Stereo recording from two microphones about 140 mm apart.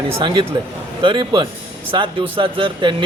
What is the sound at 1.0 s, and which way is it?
Speech, 35° right (ahead or behind).